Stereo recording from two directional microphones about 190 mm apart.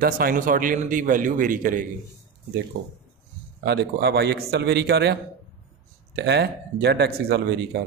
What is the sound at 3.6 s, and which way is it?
A man's voice, 60° right (ahead or behind).